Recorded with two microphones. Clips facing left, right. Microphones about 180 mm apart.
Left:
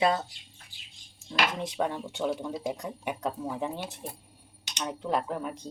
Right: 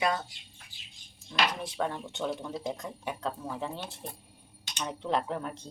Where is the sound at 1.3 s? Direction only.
20° left (ahead or behind); by 2.7 s 5° left (ahead or behind).